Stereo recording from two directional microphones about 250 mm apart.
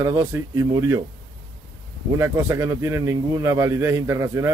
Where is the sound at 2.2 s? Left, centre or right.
Centre.